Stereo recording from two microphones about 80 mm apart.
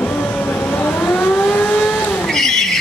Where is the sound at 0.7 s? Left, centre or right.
Left.